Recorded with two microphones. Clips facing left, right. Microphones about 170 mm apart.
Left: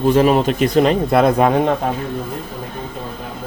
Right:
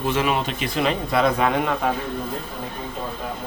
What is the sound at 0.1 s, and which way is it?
A man's voice, 40° left (ahead or behind).